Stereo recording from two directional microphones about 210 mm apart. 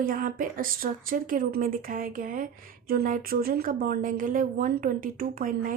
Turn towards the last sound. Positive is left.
turn(degrees=-40)  # may be behind; listen again after turning